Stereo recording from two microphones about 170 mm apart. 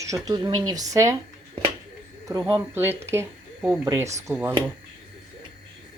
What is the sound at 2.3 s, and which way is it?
Speech, 15° right (ahead or behind).